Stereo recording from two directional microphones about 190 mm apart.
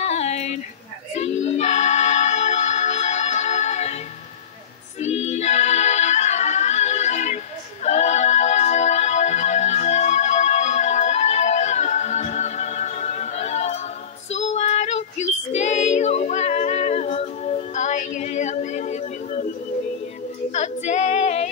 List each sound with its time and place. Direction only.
0.0 s a sound: 35° left (ahead or behind)
1.1 s music: 35° left (ahead or behind)
5.0 s music: 35° left (ahead or behind)
14.3 s female singing: 35° left (ahead or behind)
20.5 s female singing: 40° left (ahead or behind)